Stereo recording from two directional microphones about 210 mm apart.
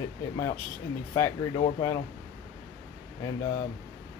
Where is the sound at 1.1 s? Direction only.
15° left (ahead or behind).